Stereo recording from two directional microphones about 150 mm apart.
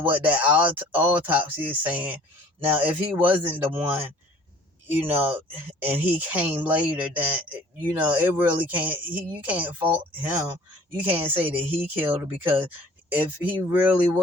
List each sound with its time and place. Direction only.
0.0 s speech: 10° right (ahead or behind)
5.0 s speech: 10° right (ahead or behind)